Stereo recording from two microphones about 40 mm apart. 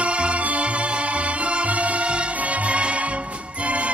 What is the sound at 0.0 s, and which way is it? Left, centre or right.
Music, right.